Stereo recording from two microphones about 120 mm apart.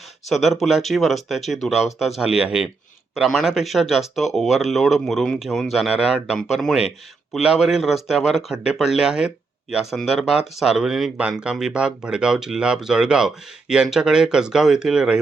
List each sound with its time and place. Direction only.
0.3 s speech: centre (ahead or behind)